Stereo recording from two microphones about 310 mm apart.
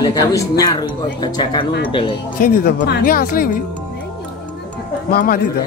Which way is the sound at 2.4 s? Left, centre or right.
Left.